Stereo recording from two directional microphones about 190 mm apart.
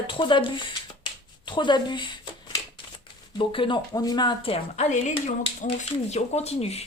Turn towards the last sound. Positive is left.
turn(degrees=35)  # may be behind; listen again after turning